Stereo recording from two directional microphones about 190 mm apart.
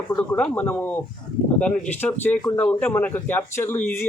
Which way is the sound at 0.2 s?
10° left (ahead or behind).